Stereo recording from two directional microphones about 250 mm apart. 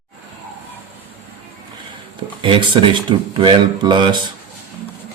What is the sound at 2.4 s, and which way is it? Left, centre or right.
Speech, centre.